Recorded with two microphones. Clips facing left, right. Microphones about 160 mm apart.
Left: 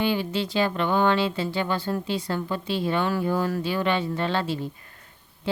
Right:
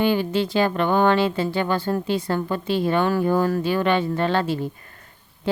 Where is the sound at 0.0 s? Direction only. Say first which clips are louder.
Right 5 dB; 50° right (ahead or behind).